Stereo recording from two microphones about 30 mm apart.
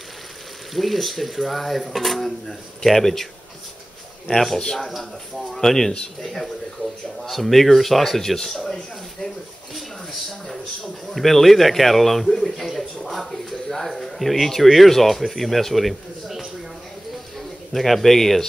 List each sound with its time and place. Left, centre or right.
0.7 s a man's voice: centre
4.3 s speech: centre
7.2 s a man's voice: centre
8.4 s speech: centre
11.1 s a man's voice: centre
12.3 s speech: centre
12.7 s a man's voice: centre
13.3 s a man's voice: centre